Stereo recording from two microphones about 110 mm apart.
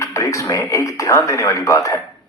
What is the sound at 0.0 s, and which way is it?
Speech, 30° left (ahead or behind).